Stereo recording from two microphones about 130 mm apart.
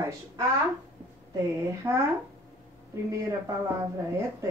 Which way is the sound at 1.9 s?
20° right (ahead or behind).